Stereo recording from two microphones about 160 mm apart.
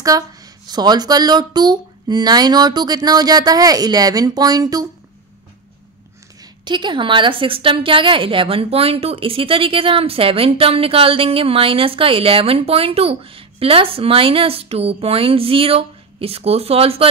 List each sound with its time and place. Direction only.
0.0 s speech: 20° right (ahead or behind)
6.4 s a woman's voice: 30° right (ahead or behind)